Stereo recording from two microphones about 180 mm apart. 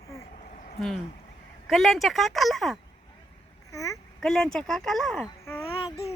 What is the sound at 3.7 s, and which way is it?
Speech, 15° left (ahead or behind).